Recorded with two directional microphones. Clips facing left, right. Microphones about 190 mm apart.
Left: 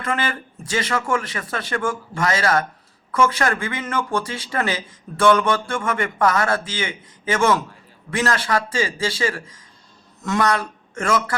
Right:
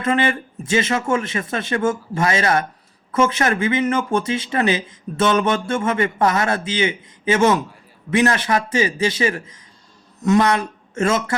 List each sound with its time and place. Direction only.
0.0 s speech: 20° right (ahead or behind)